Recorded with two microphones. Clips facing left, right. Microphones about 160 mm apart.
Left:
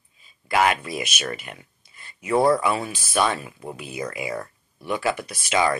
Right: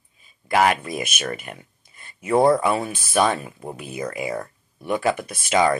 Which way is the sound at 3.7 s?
50° right (ahead or behind).